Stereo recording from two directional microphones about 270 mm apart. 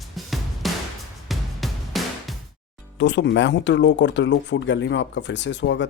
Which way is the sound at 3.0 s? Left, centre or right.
Left.